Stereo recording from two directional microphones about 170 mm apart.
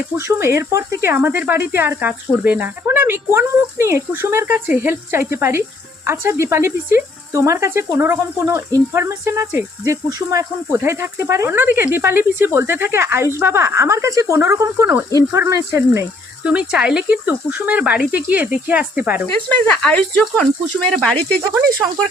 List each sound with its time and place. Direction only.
0.2 s speech: 15° right (ahead or behind)
16.4 s speech: 5° right (ahead or behind)
19.5 s speech: 10° left (ahead or behind)